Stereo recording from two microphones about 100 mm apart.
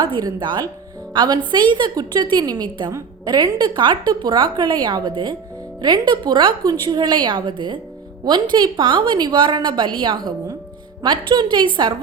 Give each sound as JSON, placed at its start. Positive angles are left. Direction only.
{"t": 0.0, "sound": "a woman's voice", "side_deg": -45}